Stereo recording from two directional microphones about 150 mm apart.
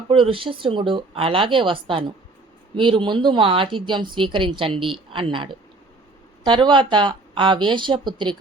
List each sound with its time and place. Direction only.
0.1 s speech: 35° right (ahead or behind)